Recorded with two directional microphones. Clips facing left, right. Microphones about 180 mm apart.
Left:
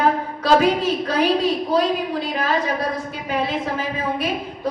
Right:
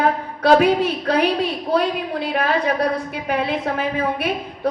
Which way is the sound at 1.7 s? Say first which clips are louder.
Even; 60° right (ahead or behind).